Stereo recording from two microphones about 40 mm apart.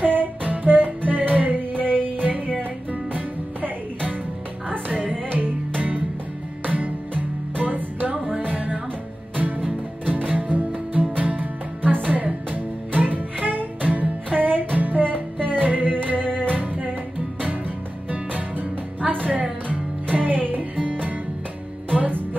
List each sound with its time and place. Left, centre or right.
0.0 s music: right
16.3 s music: left
16.5 s music: right
18.1 s music: right
21.9 s music: right